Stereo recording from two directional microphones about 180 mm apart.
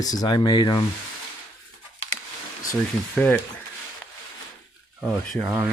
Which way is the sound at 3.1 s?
5° left (ahead or behind).